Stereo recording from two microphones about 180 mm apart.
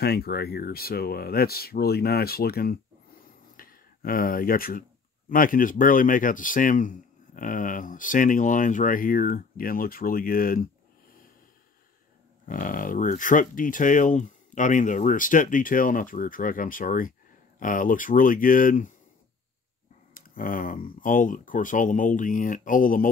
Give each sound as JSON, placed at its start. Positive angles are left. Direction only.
{"t": 0.0, "sound": "speech", "side_deg": 60}
{"t": 12.4, "sound": "speech", "side_deg": 45}
{"t": 20.2, "sound": "speech", "side_deg": 50}